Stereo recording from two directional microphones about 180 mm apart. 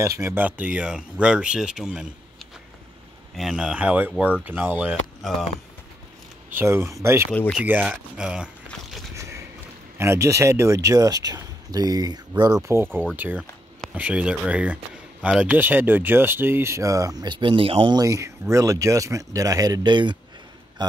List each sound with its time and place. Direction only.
0.0 s a man's voice: 15° right (ahead or behind)
6.5 s speech: 15° right (ahead or behind)
7.3 s a man's voice: 5° left (ahead or behind)
7.6 s speech: 10° right (ahead or behind)
9.1 s a sound: 15° right (ahead or behind)
9.9 s speech: 15° right (ahead or behind)